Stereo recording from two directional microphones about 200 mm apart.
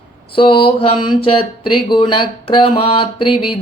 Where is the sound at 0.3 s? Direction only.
25° left (ahead or behind).